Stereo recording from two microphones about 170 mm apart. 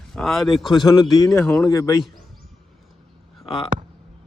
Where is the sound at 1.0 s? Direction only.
20° left (ahead or behind).